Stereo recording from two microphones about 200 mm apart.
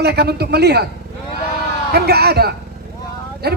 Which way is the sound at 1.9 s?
50° right (ahead or behind).